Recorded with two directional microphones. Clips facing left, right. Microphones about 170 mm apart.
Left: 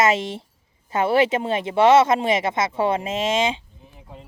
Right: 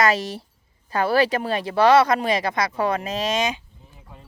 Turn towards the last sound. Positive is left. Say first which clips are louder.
# left 4 dB
turn(degrees=25)  # may be behind; listen again after turning